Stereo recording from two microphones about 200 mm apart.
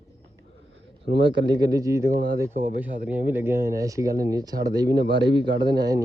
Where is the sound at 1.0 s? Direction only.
60° right (ahead or behind).